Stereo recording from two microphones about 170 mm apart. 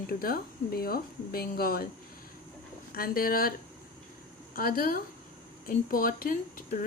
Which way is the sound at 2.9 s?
60° left (ahead or behind).